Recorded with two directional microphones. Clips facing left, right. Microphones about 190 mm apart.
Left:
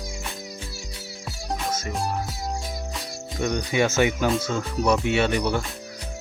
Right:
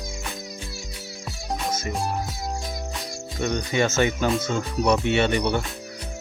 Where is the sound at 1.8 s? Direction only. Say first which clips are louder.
Right 1 dB; centre (ahead or behind).